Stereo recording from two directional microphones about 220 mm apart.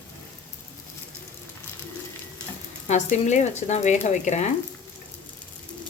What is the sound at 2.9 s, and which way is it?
Speech, 30° left (ahead or behind).